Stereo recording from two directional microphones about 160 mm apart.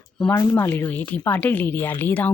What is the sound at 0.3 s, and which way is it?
Speech, 20° left (ahead or behind).